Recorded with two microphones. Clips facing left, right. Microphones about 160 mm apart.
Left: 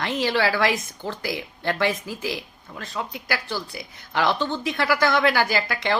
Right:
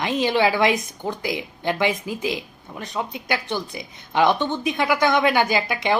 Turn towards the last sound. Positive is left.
turn(degrees=-20)  # may be behind; listen again after turning